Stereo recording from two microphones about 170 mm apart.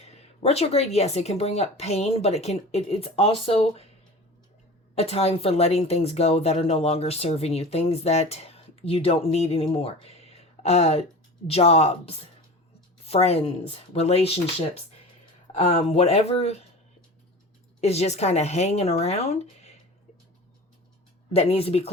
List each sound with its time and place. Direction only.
0.0 s speech: 40° left (ahead or behind)
4.9 s speech: 35° left (ahead or behind)
15.5 s speech: 35° left (ahead or behind)
17.7 s speech: 40° left (ahead or behind)
21.3 s speech: 35° left (ahead or behind)